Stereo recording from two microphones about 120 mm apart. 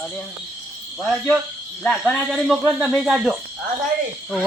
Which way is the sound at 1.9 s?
5° left (ahead or behind).